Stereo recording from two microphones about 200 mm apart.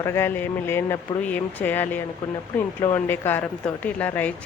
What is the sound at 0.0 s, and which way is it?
A woman's voice, 15° left (ahead or behind).